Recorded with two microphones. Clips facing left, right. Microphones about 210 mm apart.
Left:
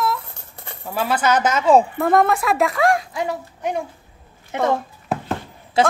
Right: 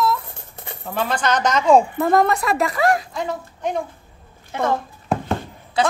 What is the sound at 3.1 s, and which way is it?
Speech, 10° left (ahead or behind).